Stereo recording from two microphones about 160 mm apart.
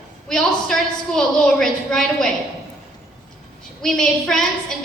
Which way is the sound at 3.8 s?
5° left (ahead or behind).